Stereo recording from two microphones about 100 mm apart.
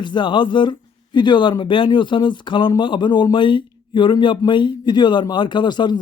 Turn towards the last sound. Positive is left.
turn(degrees=50)  # may be behind; listen again after turning